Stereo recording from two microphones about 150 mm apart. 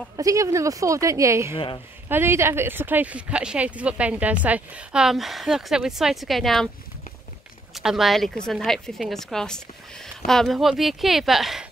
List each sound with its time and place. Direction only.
0.2 s a woman's voice: 20° right (ahead or behind); by 6.7 s centre (ahead or behind)
7.7 s a woman's voice: centre (ahead or behind)